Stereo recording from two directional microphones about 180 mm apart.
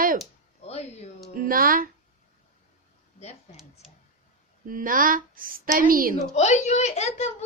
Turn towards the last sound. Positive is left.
turn(degrees=35)  # may be behind; listen again after turning